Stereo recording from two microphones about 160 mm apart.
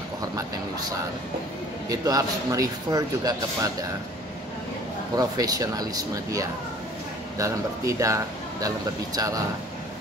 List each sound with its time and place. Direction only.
1.9 s a man's voice: 20° right (ahead or behind)
5.1 s a man's voice: 25° right (ahead or behind)